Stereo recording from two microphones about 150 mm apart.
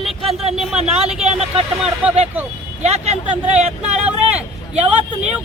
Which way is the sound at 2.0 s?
10° right (ahead or behind).